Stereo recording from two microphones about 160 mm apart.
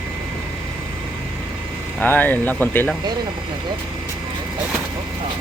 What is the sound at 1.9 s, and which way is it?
Speech, 10° left (ahead or behind).